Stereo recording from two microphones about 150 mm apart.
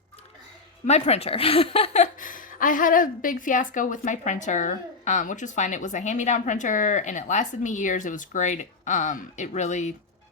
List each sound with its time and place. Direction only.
0.9 s a woman's voice: 45° left (ahead or behind)